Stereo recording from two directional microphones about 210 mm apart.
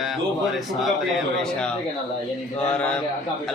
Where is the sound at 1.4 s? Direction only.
5° left (ahead or behind).